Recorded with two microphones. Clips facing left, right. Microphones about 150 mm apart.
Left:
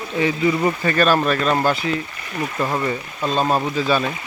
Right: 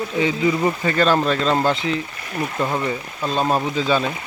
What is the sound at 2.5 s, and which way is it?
Speech, centre (ahead or behind).